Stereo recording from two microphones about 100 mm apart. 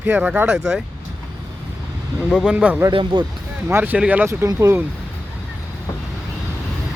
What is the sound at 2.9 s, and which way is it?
Speech, 55° right (ahead or behind).